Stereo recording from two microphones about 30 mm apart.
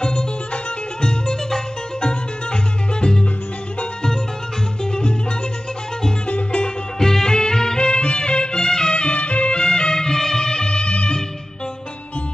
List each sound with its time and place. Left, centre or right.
0.0 s music: left
6.2 s music: left
7.0 s music: centre
7.2 s music: left
9.0 s music: left
9.6 s music: left